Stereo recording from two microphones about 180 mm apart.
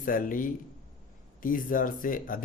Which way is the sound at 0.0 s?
50° left (ahead or behind).